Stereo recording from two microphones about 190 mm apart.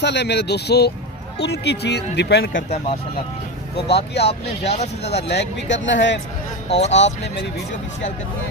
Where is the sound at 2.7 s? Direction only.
35° left (ahead or behind).